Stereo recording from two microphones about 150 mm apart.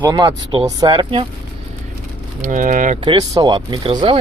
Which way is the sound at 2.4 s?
60° right (ahead or behind).